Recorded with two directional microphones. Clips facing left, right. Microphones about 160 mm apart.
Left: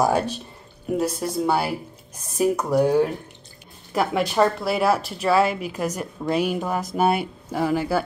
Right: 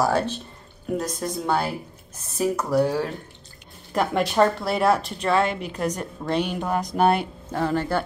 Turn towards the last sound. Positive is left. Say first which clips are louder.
# left 2 dB
turn(degrees=10)  # may be behind; listen again after turning